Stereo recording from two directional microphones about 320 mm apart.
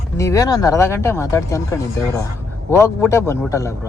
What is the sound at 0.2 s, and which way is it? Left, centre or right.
Speech, centre.